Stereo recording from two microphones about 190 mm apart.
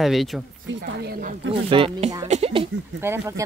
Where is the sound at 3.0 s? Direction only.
10° right (ahead or behind).